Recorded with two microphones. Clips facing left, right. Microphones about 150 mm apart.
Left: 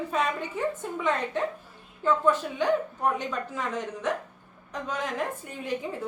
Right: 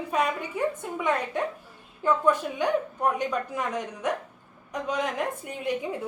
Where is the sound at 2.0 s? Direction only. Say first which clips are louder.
Right 1 dB; 10° right (ahead or behind).